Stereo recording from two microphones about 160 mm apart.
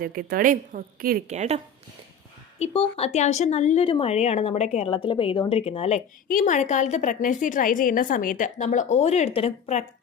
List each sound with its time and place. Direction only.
0.0 s a woman's voice: 65° right (ahead or behind)
1.3 s speech: 45° right (ahead or behind)
2.6 s a woman's voice: 40° left (ahead or behind)
6.2 s a woman's voice: 55° left (ahead or behind); by 9.8 s 40° left (ahead or behind)